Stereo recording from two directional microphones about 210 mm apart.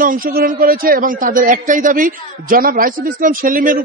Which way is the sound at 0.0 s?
40° right (ahead or behind).